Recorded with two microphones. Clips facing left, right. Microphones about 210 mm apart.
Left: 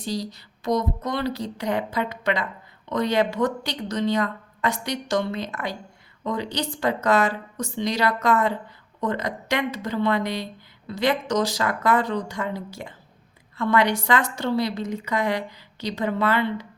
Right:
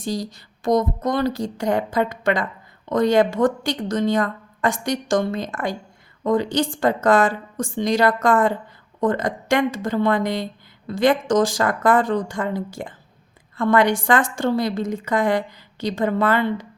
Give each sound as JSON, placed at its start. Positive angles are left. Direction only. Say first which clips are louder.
{"t": 0.0, "sound": "a woman's voice", "louder": "right 3 dB", "side_deg": -45}